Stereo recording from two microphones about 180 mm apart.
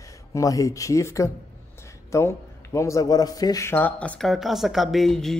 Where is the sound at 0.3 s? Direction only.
20° left (ahead or behind).